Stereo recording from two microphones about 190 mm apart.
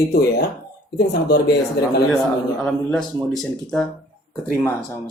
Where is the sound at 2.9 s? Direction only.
Centre (ahead or behind).